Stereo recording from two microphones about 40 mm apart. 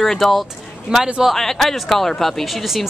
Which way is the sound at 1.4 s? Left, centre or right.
Centre.